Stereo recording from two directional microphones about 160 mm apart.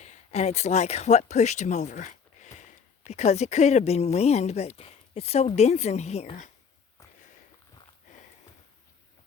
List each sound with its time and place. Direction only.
0.0 s a woman's voice: 45° left (ahead or behind)